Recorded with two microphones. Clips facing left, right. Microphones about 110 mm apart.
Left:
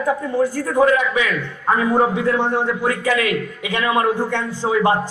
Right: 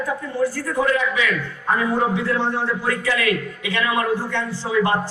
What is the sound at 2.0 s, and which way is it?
A man's voice, 15° left (ahead or behind).